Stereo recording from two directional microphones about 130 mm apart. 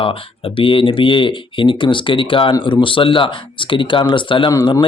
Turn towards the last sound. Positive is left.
turn(degrees=35)  # may be behind; listen again after turning